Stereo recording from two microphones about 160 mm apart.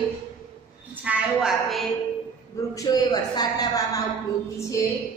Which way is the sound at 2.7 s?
20° left (ahead or behind).